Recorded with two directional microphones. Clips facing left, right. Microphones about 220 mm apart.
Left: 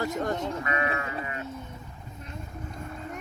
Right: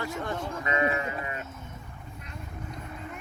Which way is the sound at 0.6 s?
20° right (ahead or behind).